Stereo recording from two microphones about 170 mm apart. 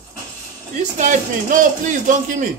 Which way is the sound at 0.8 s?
50° right (ahead or behind).